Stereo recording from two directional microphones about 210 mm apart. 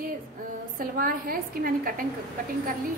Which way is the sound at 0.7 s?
45° right (ahead or behind).